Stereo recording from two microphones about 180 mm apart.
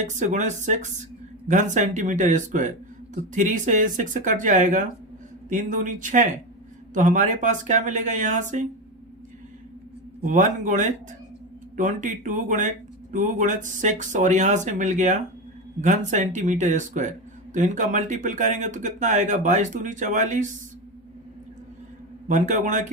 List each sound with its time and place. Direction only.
0.0 s speech: 45° right (ahead or behind)
10.2 s speech: 45° right (ahead or behind)
22.3 s speech: 45° right (ahead or behind)